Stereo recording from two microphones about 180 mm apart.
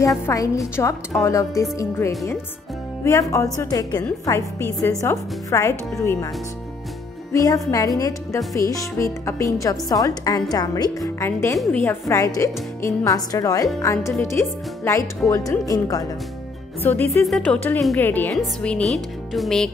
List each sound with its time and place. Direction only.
0.0 s a woman's voice: 15° left (ahead or behind)
7.3 s a woman's voice: 20° left (ahead or behind); by 19.7 s centre (ahead or behind)